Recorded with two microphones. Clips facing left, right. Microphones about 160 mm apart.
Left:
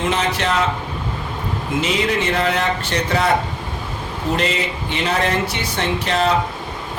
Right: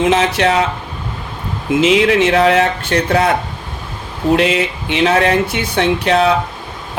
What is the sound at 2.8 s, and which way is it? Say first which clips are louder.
Speech: right 6 dB; 60° right (ahead or behind).